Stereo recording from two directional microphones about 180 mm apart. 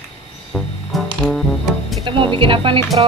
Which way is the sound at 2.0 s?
30° right (ahead or behind).